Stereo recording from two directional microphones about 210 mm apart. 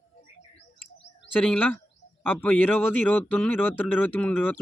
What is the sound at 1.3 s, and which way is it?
Speech, 10° left (ahead or behind).